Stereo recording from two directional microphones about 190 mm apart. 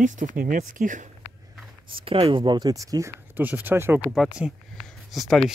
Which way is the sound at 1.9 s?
30° right (ahead or behind).